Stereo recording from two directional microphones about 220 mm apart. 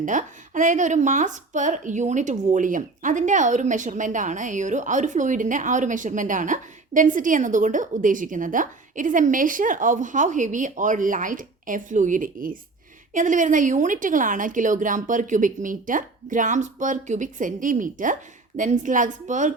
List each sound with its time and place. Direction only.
0.0 s speech: 35° right (ahead or behind)